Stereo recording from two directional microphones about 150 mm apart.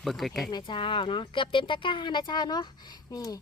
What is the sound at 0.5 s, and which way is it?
Speech, 35° left (ahead or behind).